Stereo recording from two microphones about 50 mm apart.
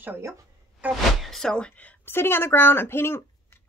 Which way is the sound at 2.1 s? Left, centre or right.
Left.